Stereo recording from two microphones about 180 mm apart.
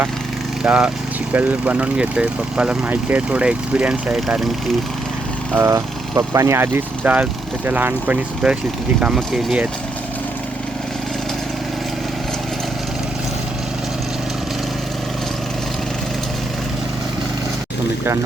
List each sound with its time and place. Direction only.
0.6 s speech: 5° right (ahead or behind)
5.5 s speech: 15° right (ahead or behind)